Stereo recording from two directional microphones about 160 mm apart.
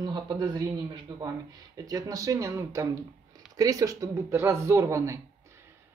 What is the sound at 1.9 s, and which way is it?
A woman's voice, 20° right (ahead or behind).